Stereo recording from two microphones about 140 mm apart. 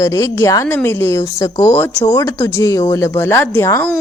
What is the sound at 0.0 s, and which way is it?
Speech, 20° left (ahead or behind).